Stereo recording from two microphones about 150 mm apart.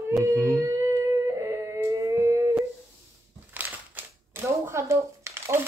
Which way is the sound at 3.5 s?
10° right (ahead or behind).